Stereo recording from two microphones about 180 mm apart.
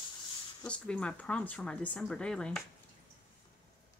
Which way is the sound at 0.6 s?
5° left (ahead or behind).